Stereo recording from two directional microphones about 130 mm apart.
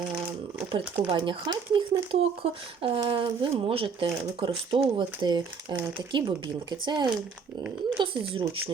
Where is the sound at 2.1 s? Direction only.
45° right (ahead or behind).